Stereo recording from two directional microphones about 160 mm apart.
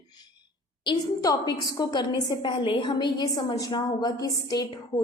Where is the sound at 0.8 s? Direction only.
25° left (ahead or behind).